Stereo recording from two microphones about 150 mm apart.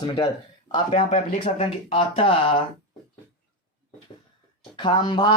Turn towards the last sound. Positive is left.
turn(degrees=30)  # may be behind; listen again after turning